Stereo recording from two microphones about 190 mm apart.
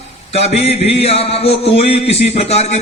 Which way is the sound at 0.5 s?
35° left (ahead or behind).